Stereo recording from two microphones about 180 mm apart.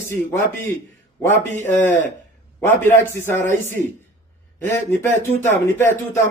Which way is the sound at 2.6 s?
15° left (ahead or behind).